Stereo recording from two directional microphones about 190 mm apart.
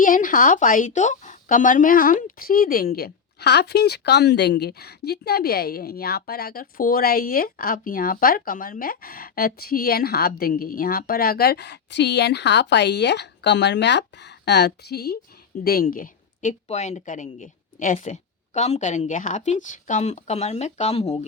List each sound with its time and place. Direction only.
0.0 s a woman's voice: 45° left (ahead or behind)